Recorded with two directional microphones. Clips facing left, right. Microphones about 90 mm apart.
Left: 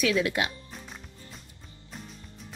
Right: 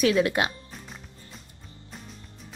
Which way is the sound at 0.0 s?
40° right (ahead or behind).